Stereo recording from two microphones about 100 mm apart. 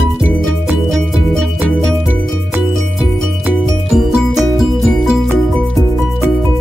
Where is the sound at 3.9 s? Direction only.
5° right (ahead or behind).